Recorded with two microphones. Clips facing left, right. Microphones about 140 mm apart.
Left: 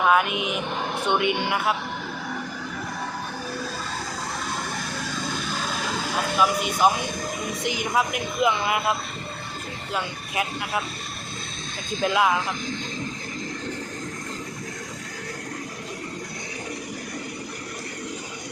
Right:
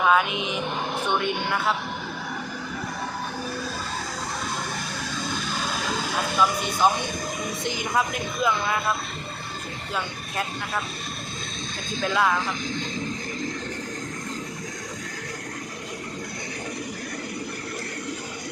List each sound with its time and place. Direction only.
0.0 s speech: 5° left (ahead or behind)
1.2 s speech: 80° left
1.5 s speech: 10° left (ahead or behind)
6.1 s a woman's voice: 5° left (ahead or behind)
9.9 s speech: 5° left (ahead or behind)
12.0 s speech: 5° left (ahead or behind)